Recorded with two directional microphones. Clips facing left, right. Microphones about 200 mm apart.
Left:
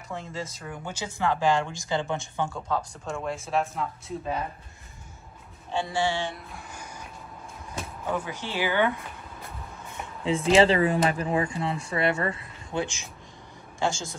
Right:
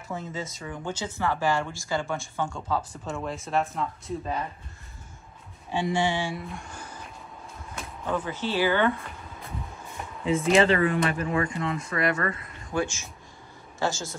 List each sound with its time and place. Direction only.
0.1 s speech: centre (ahead or behind); by 2.4 s 20° left (ahead or behind)
2.5 s speech: centre (ahead or behind)
5.7 s speech: 20° right (ahead or behind)
6.3 s speech: centre (ahead or behind)
8.1 s speech: 15° left (ahead or behind)
10.2 s speech: 30° left (ahead or behind)